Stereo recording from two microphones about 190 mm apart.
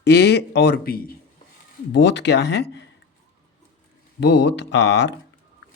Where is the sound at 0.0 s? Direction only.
60° left (ahead or behind).